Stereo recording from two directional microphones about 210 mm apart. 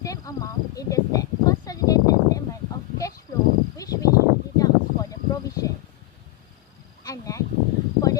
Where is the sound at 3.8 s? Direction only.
15° left (ahead or behind).